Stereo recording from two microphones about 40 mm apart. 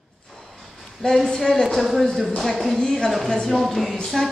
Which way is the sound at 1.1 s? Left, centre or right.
Centre.